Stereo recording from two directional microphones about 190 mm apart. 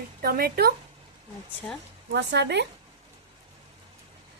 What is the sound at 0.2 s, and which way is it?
Speech, 50° right (ahead or behind).